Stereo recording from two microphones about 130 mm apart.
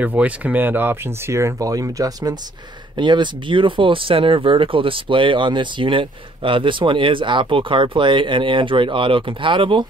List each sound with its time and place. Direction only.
0.0 s speech: 10° right (ahead or behind); by 9.8 s 40° right (ahead or behind)